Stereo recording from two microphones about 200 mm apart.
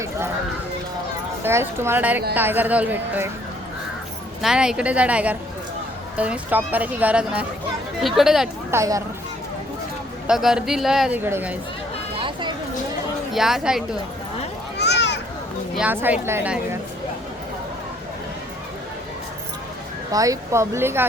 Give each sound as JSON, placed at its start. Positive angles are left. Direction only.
{"t": 1.5, "sound": "speech", "side_deg": -10}
{"t": 4.4, "sound": "a woman's voice", "side_deg": -5}
{"t": 8.7, "sound": "speech", "side_deg": -15}
{"t": 10.2, "sound": "a woman's voice", "side_deg": 0}
{"t": 12.2, "sound": "a sound", "side_deg": -25}
{"t": 13.3, "sound": "a woman's voice", "side_deg": 0}
{"t": 14.8, "sound": "a sound", "side_deg": 60}
{"t": 15.7, "sound": "speech", "side_deg": -5}
{"t": 20.1, "sound": "speech", "side_deg": -15}